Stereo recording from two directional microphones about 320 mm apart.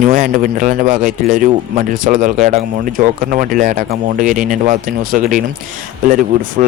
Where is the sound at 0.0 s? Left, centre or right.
Right.